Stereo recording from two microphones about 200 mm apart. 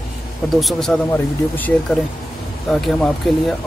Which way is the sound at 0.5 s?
Centre (ahead or behind).